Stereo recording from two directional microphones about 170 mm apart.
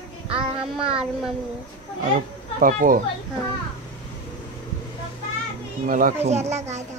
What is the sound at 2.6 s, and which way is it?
Speech, 55° right (ahead or behind).